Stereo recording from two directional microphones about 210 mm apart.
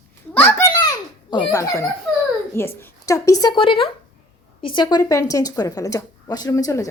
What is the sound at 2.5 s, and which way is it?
A woman's voice, 10° left (ahead or behind).